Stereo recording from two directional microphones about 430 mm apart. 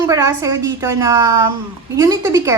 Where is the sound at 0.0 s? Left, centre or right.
Centre.